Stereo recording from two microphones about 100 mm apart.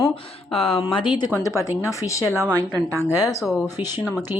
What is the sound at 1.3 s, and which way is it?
Speech, 30° left (ahead or behind).